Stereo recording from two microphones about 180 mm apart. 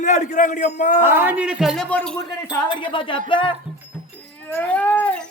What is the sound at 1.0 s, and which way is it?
Speech, 10° right (ahead or behind).